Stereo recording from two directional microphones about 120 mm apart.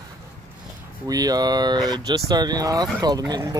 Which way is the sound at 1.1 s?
30° right (ahead or behind).